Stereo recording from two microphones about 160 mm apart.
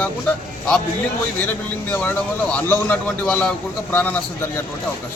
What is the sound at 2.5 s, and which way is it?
A man's voice, 10° left (ahead or behind).